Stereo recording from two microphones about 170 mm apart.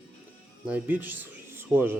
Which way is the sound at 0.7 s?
10° right (ahead or behind).